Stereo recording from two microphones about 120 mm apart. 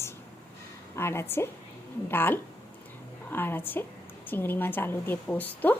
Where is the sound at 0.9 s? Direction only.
20° left (ahead or behind).